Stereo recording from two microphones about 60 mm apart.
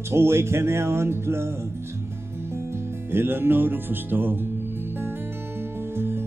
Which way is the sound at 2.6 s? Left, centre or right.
Right.